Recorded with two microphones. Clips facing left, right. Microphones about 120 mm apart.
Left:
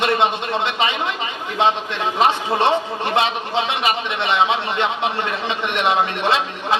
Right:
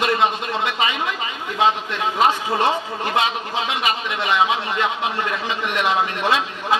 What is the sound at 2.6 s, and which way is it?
A man's voice, 25° left (ahead or behind).